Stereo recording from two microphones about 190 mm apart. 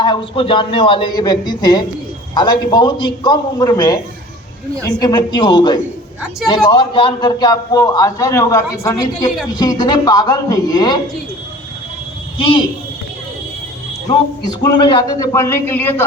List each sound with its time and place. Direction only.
0.0 s a man's voice: 25° left (ahead or behind)
12.4 s a man's voice: 25° left (ahead or behind)
14.6 s speech: 25° left (ahead or behind)